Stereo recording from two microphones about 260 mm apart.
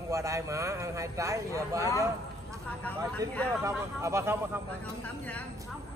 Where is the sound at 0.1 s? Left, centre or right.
Centre.